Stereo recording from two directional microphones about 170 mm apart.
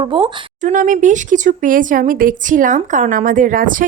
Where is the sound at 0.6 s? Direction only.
45° right (ahead or behind).